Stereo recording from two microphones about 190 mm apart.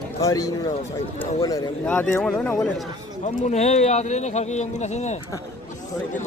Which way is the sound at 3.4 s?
35° left (ahead or behind).